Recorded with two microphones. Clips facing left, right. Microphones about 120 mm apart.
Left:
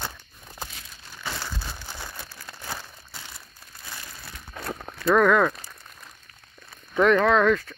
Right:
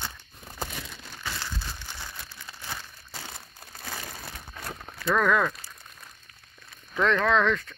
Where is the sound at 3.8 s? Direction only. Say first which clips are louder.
Right 4 dB; 85° right.